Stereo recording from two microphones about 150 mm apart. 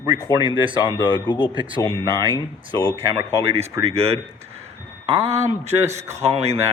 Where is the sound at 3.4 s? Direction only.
40° right (ahead or behind).